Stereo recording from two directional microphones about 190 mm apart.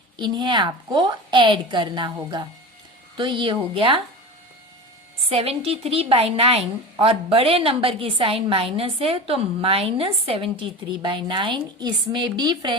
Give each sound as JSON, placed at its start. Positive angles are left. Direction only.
{"t": 0.2, "sound": "a woman's voice", "side_deg": -25}
{"t": 5.3, "sound": "a woman's voice", "side_deg": -30}